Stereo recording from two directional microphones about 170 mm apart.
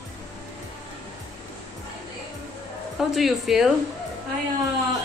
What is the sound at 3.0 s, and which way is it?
Speech, centre (ahead or behind).